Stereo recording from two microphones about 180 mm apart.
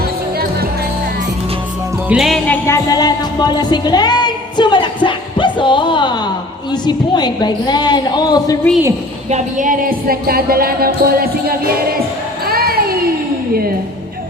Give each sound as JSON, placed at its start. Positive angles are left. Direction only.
{"t": 2.0, "sound": "music", "side_deg": 0}
{"t": 2.6, "sound": "a woman's voice", "side_deg": 20}
{"t": 9.3, "sound": "music", "side_deg": -45}